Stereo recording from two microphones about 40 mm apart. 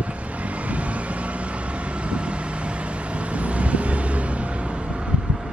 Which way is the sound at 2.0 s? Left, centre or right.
Right.